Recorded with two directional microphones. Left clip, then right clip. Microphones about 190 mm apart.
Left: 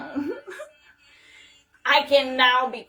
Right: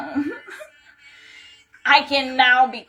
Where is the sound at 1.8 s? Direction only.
15° left (ahead or behind).